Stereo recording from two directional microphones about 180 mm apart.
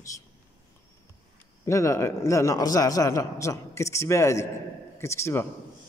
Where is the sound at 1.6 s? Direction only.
15° left (ahead or behind).